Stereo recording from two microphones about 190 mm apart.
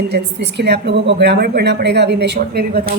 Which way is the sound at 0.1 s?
60° right (ahead or behind).